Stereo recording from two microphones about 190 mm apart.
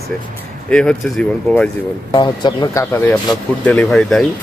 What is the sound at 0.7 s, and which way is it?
Speech, 5° left (ahead or behind).